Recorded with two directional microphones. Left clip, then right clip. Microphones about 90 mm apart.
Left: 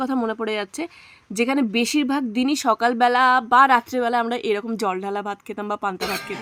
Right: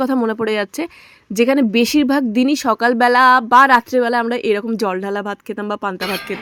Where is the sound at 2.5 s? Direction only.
30° right (ahead or behind).